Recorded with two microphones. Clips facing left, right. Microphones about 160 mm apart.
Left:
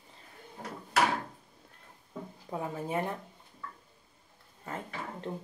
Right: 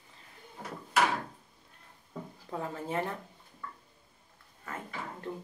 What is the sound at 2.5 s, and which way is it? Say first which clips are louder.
Speech: left 1 dB; 15° left (ahead or behind).